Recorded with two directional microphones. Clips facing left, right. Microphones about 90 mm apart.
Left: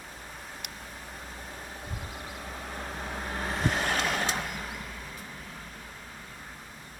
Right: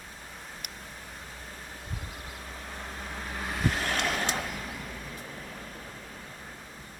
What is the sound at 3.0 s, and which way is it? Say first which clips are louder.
Vehicle: left 2 dB; 15° left (ahead or behind).